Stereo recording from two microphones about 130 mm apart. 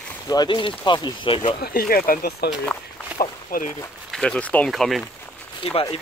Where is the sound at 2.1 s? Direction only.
90° left.